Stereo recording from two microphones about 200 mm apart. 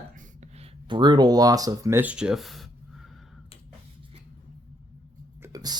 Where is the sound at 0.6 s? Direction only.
25° right (ahead or behind); by 2.6 s centre (ahead or behind).